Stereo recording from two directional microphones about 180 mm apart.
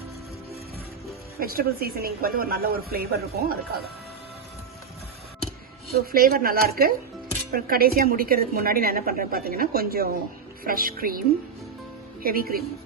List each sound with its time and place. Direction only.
1.4 s a woman's voice: 55° right (ahead or behind)
5.9 s a woman's voice: 55° right (ahead or behind)
12.2 s a woman's voice: 55° right (ahead or behind)